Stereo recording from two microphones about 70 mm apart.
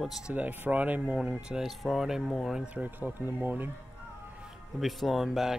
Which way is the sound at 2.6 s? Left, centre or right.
Right.